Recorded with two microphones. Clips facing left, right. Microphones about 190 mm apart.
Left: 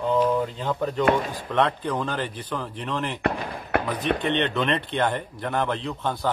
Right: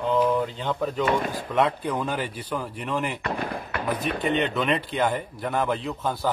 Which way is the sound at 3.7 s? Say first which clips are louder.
Left 12 dB; 60° left (ahead or behind).